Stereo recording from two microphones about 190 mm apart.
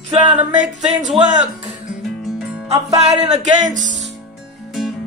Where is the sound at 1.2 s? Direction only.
30° right (ahead or behind).